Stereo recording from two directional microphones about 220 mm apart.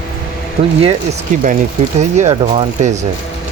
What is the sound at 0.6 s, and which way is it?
Speech, 35° right (ahead or behind).